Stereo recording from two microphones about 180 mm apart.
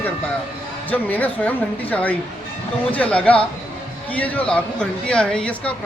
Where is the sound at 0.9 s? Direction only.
10° left (ahead or behind).